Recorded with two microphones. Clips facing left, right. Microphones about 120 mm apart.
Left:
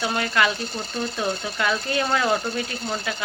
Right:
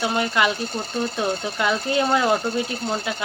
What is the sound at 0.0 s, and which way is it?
Speech, 20° right (ahead or behind).